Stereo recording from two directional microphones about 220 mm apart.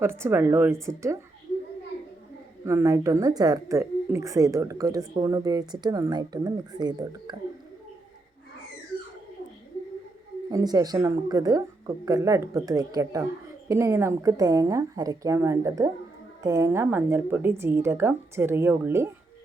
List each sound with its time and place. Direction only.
0.0 s a woman's voice: 10° right (ahead or behind)
2.6 s a woman's voice: 15° right (ahead or behind)
10.5 s a woman's voice: 15° right (ahead or behind)